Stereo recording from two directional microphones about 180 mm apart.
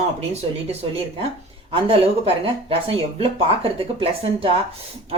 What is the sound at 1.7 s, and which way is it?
A woman's voice, 30° right (ahead or behind).